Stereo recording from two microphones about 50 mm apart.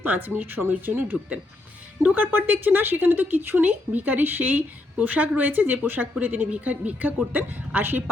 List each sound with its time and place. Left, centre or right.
0.0 s speech: right